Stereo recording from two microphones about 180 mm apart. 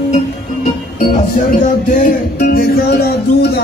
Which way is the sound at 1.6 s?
50° left (ahead or behind).